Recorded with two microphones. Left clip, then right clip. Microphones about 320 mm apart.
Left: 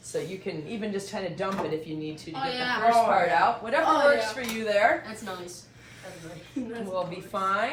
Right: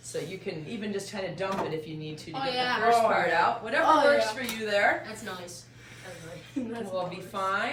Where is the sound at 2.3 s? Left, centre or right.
Centre.